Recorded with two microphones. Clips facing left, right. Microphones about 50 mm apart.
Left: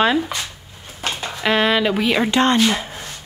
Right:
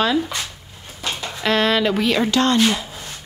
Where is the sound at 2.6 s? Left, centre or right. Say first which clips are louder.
Even; left.